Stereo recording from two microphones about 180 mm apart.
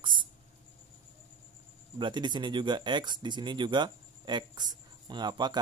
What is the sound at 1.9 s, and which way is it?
Speech, 25° right (ahead or behind).